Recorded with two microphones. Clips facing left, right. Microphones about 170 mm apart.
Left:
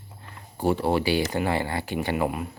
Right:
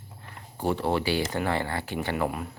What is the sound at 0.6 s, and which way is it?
Speech, 10° left (ahead or behind).